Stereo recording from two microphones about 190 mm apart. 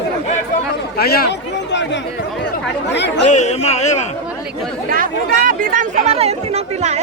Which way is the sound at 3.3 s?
35° left (ahead or behind).